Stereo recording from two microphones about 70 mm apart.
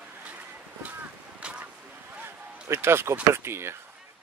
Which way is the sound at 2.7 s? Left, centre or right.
Right.